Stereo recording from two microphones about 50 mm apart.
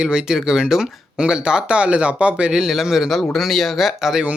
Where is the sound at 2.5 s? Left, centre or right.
Centre.